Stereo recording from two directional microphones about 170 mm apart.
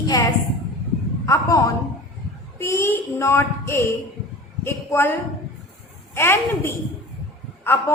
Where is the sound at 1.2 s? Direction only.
20° left (ahead or behind).